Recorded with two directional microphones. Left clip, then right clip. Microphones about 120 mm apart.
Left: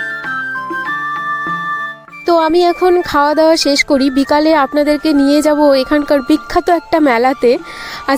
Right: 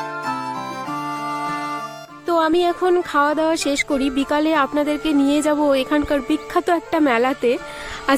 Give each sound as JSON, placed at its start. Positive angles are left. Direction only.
{"t": 2.2, "sound": "speech", "side_deg": 45}